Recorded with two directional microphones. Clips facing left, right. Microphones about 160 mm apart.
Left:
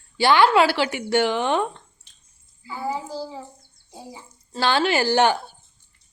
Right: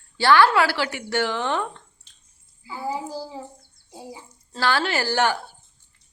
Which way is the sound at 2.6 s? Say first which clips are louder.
Left 1 dB; 10° right (ahead or behind).